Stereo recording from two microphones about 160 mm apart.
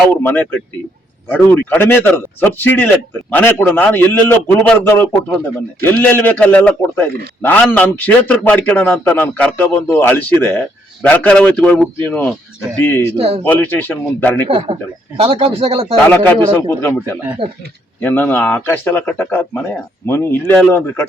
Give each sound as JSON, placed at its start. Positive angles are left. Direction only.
{"t": 0.2, "sound": "a man's voice", "side_deg": 10}
{"t": 13.1, "sound": "speech", "side_deg": -35}
{"t": 13.4, "sound": "a man's voice", "side_deg": 10}
{"t": 14.4, "sound": "speech", "side_deg": -35}
{"t": 16.0, "sound": "a man's voice", "side_deg": 10}